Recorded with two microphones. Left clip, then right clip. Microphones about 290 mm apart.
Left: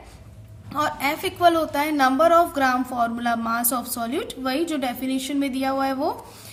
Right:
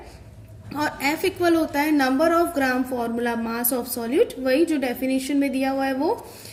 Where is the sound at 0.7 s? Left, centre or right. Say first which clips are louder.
Left 1 dB; left.